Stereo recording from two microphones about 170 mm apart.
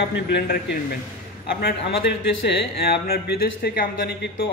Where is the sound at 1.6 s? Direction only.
75° left (ahead or behind).